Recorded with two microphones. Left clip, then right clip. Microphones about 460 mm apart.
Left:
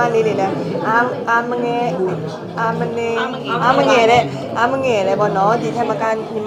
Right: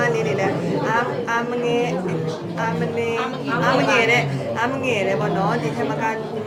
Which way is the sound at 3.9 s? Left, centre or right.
Left.